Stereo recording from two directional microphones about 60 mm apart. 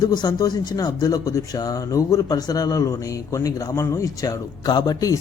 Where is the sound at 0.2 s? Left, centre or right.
Left.